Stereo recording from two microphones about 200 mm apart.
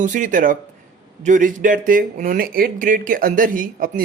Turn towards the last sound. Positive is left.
turn(degrees=-45)  # may be behind; listen again after turning